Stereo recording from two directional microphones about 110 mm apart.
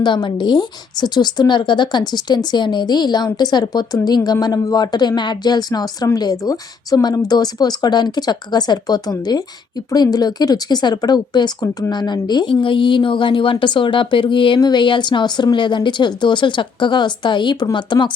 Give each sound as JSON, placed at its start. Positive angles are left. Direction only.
{"t": 0.0, "sound": "speech", "side_deg": 45}